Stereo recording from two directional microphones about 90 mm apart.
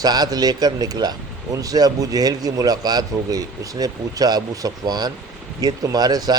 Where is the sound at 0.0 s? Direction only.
45° right (ahead or behind).